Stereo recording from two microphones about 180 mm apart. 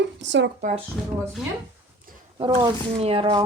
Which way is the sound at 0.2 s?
80° right.